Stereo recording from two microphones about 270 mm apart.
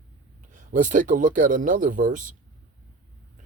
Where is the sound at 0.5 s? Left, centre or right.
Right.